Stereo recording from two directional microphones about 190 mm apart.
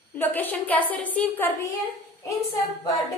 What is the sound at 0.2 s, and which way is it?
A woman's voice, 10° left (ahead or behind).